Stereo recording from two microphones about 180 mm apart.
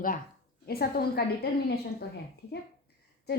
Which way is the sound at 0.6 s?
60° left (ahead or behind).